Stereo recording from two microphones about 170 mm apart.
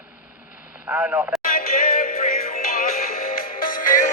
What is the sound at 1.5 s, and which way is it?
Music, 55° left (ahead or behind).